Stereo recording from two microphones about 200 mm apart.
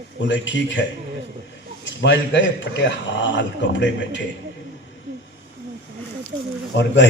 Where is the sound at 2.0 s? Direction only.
65° left (ahead or behind).